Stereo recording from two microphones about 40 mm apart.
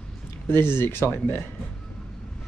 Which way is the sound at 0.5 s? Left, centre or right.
Left.